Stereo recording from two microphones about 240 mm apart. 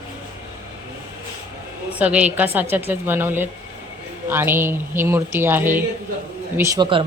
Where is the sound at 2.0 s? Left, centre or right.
Centre.